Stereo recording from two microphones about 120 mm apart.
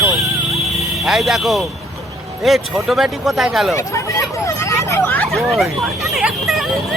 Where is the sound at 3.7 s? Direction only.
25° left (ahead or behind).